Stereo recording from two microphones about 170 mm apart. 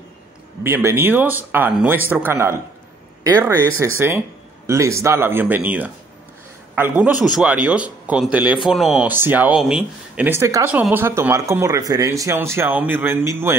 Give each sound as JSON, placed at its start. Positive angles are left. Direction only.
{"t": 0.7, "sound": "speech", "side_deg": -15}